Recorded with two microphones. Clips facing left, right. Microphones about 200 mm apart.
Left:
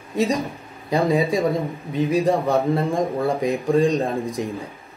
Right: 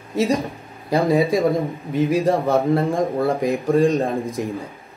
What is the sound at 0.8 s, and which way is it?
Speech, centre (ahead or behind).